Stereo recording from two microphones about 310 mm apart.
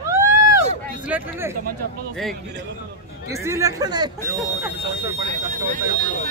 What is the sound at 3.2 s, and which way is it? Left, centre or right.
Speech, centre.